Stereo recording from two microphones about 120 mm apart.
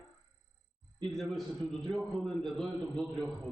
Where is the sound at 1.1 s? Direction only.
Centre (ahead or behind).